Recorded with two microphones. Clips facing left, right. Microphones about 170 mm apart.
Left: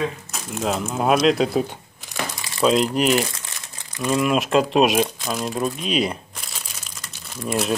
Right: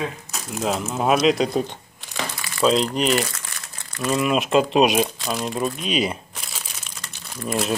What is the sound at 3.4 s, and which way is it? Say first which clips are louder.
Crumpling: even; 15° left (ahead or behind).